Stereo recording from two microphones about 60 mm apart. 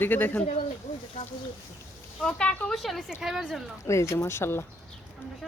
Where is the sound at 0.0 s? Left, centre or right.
Left.